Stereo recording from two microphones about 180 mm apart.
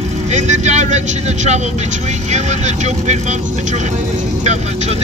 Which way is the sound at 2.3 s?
40° right (ahead or behind).